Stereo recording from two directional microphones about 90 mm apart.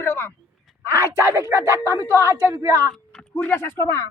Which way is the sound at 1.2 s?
30° right (ahead or behind).